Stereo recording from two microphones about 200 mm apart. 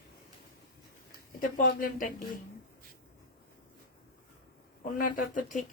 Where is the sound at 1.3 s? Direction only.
45° left (ahead or behind).